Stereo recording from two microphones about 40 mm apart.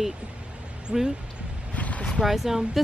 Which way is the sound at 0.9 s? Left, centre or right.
Right.